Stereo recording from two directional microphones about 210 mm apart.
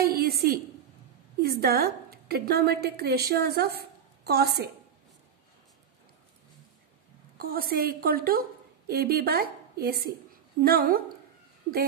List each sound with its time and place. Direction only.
0.0 s a sound: 45° right (ahead or behind)
1.4 s a woman's voice: 45° right (ahead or behind)
7.3 s a woman's voice: 45° right (ahead or behind)